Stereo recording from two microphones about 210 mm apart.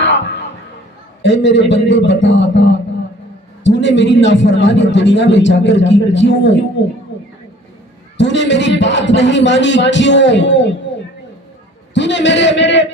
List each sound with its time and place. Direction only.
0.0 s a sound: 60° left (ahead or behind)
1.2 s a man's voice: 60° left (ahead or behind)
8.2 s a man's voice: 60° left (ahead or behind)
11.9 s a man's voice: 60° left (ahead or behind)